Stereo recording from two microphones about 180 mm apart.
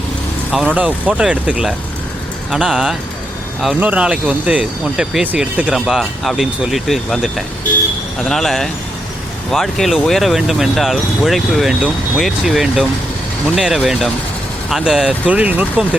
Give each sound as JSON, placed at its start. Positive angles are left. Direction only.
{"t": 0.5, "sound": "speech", "side_deg": -5}